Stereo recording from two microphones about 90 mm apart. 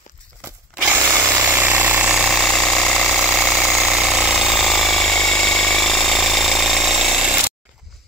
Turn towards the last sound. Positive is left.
turn(degrees=-5)  # may be behind; listen again after turning